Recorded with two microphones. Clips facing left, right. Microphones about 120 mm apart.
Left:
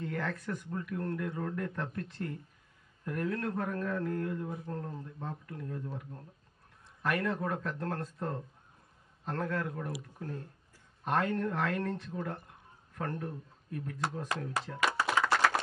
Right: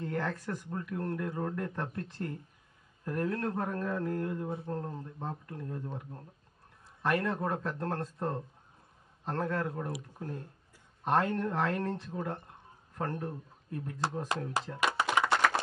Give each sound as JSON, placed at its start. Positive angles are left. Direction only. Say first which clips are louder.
{"t": 0.0, "sound": "speech", "louder": "right 2 dB", "side_deg": -30}
{"t": 9.2, "sound": "speech", "louder": "right 2 dB", "side_deg": -30}
{"t": 10.2, "sound": "speech", "louder": "right 1 dB", "side_deg": -20}
{"t": 11.0, "sound": "speech", "louder": "right 2 dB", "side_deg": -30}
{"t": 14.7, "sound": "a sound", "louder": "even", "side_deg": -25}
{"t": 15.1, "sound": "clapping", "louder": "right 1 dB", "side_deg": -20}
{"t": 15.4, "sound": "a sound", "louder": "even", "side_deg": 0}